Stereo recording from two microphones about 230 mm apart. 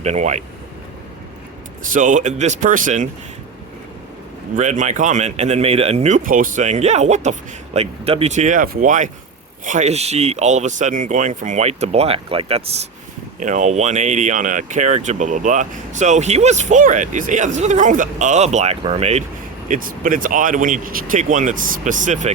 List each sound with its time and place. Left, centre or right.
0.0 s speech: right
1.9 s speech: right
4.5 s speech: right